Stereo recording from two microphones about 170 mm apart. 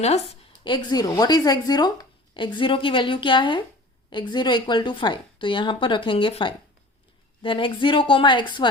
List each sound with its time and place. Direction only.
0.6 s speech: 25° left (ahead or behind)